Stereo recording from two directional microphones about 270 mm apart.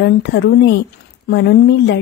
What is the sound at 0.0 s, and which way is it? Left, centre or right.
A woman's voice, left.